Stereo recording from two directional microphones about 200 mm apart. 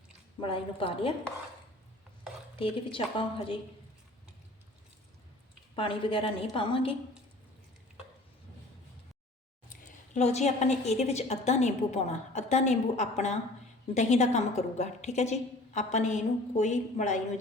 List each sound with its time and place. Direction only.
0.4 s a woman's voice: 25° left (ahead or behind)
2.6 s a woman's voice: 25° left (ahead or behind)
5.7 s a woman's voice: 25° left (ahead or behind)
9.6 s a woman's voice: 35° left (ahead or behind)